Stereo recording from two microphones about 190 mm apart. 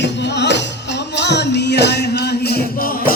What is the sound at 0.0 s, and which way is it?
Music, 65° left (ahead or behind).